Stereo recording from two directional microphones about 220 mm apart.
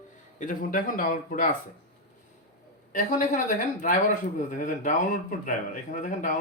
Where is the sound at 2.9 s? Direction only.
35° left (ahead or behind).